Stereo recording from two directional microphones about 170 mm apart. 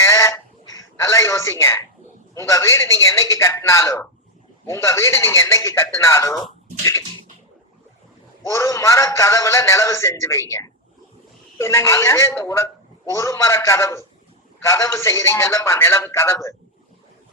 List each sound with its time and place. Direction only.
0.0 s a sound: 15° left (ahead or behind)
2.3 s speech: 15° left (ahead or behind)
8.4 s speech: 20° left (ahead or behind)
11.5 s speech: 15° left (ahead or behind)